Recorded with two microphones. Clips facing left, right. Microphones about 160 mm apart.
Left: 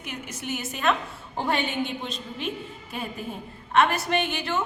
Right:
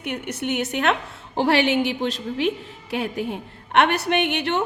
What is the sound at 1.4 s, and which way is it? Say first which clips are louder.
A woman's voice: right 7 dB; 85° right.